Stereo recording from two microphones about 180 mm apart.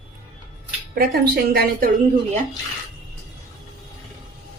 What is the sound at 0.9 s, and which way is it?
Speech, 55° right (ahead or behind).